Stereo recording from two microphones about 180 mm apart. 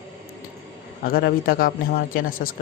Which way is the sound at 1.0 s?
55° left (ahead or behind).